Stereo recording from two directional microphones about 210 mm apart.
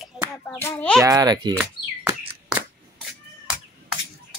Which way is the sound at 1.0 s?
15° right (ahead or behind).